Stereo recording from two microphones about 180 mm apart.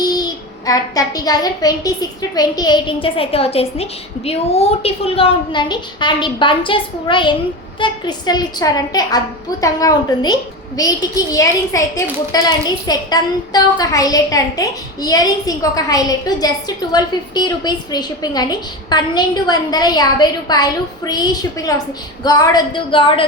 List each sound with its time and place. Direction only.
0.0 s a woman's voice: 20° left (ahead or behind)